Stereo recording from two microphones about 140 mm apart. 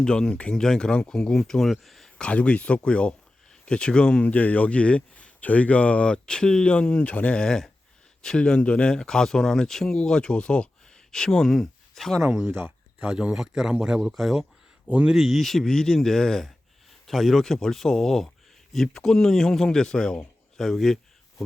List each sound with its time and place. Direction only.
0.0 s speech: 5° left (ahead or behind)
12.5 s a sound: 15° right (ahead or behind)
13.1 s a man's voice: 5° right (ahead or behind)